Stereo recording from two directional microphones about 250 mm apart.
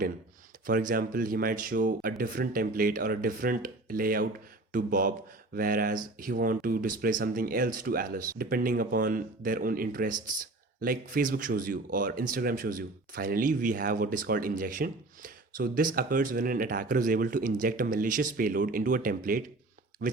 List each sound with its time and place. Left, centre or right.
0.7 s speech: right